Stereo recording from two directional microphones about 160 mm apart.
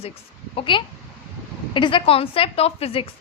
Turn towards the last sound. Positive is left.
turn(degrees=35)  # may be behind; listen again after turning